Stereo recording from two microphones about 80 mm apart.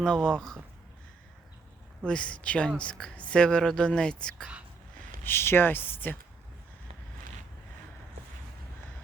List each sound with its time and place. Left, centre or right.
0.3 s a woman's voice: centre
2.0 s a woman's voice: centre
5.2 s speech: left